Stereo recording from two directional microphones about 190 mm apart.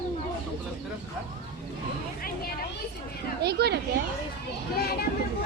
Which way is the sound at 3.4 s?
55° right (ahead or behind).